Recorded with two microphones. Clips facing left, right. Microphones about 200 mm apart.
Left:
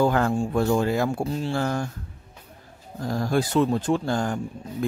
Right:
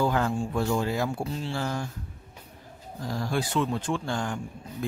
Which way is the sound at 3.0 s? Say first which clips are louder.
Left 5 dB; 50° left (ahead or behind).